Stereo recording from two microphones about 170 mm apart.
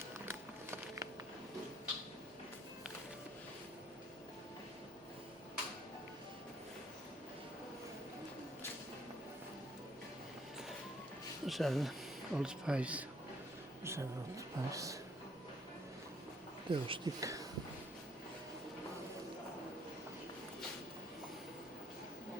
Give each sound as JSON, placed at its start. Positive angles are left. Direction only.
{"t": 0.3, "sound": "a sound", "side_deg": -15}
{"t": 11.4, "sound": "speech", "side_deg": 0}
{"t": 16.6, "sound": "speech", "side_deg": -30}